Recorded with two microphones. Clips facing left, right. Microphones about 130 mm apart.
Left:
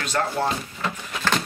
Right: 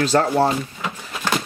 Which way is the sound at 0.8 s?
10° right (ahead or behind).